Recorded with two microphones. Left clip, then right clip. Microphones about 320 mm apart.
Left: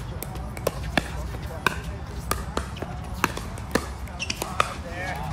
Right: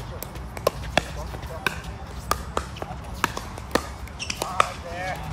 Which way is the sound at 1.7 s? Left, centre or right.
Centre.